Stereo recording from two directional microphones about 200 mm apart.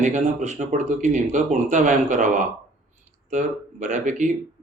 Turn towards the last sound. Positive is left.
turn(degrees=-40)  # may be behind; listen again after turning